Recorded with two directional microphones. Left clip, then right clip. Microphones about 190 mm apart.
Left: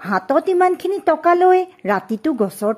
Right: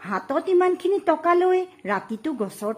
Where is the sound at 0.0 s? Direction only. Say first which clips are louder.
Left 8 dB; 30° left (ahead or behind).